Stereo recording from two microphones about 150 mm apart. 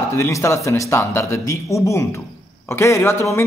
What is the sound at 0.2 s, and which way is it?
A man's voice, 20° left (ahead or behind).